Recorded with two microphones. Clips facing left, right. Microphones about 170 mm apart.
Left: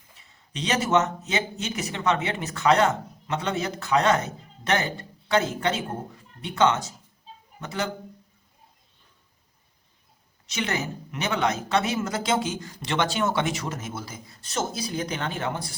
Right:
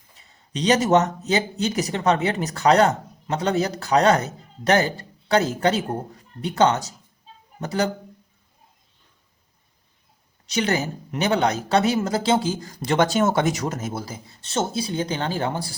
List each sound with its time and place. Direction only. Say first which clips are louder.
0.2 s speech: right 7 dB; 35° right (ahead or behind)
10.4 s speech: right 6 dB; 35° right (ahead or behind)